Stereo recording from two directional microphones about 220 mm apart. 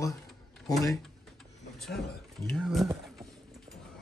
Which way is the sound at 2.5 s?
Centre (ahead or behind).